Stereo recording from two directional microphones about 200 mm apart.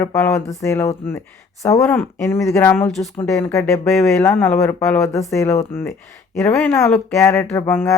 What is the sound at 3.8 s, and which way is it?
Speech, centre (ahead or behind).